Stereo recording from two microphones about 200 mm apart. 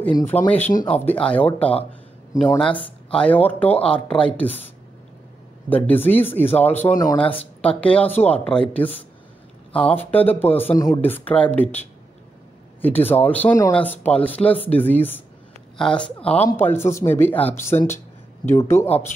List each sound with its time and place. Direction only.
0.0 s speech: 10° left (ahead or behind)
2.8 s speech: 5° left (ahead or behind)
5.7 s speech: 10° left (ahead or behind); by 7.4 s 25° left (ahead or behind)
7.6 s speech: 5° left (ahead or behind)
9.8 s speech: 5° left (ahead or behind)
12.8 s speech: 10° left (ahead or behind)
16.2 s speech: 30° left (ahead or behind)
16.4 s speech: 10° left (ahead or behind)